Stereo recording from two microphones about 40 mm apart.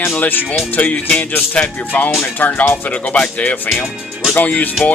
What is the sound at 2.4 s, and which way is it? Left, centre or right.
Speech, left.